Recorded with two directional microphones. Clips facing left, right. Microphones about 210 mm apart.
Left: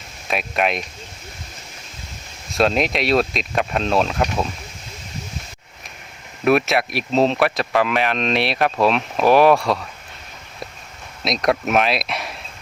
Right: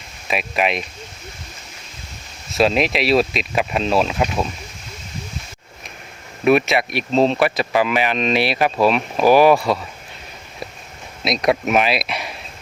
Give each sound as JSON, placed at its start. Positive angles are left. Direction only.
{"t": 0.3, "sound": "speech", "side_deg": 0}
{"t": 2.5, "sound": "speech", "side_deg": 0}
{"t": 6.4, "sound": "speech", "side_deg": 0}
{"t": 11.2, "sound": "speech", "side_deg": 0}